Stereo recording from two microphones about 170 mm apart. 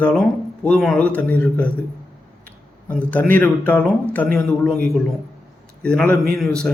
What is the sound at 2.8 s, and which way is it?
A man's voice, 10° left (ahead or behind).